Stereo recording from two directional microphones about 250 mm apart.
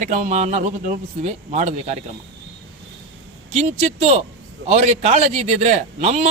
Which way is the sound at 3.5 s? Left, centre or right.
Right.